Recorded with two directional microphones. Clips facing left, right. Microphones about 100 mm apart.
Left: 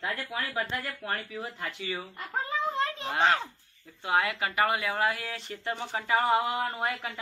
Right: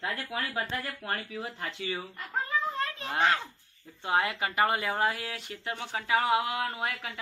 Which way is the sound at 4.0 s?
25° right (ahead or behind).